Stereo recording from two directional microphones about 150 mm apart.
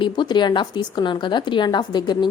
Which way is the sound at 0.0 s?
30° left (ahead or behind).